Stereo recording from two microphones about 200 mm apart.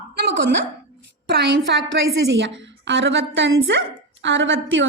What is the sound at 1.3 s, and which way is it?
A woman's voice, 60° right (ahead or behind).